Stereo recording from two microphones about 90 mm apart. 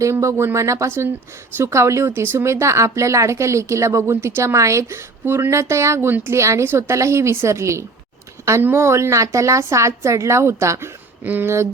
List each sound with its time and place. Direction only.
0.0 s speech: 35° right (ahead or behind)